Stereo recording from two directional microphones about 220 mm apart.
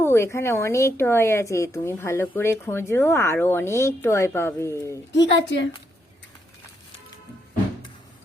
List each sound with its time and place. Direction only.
0.0 s a woman's voice: 10° left (ahead or behind)
5.1 s a woman's voice: 55° left (ahead or behind)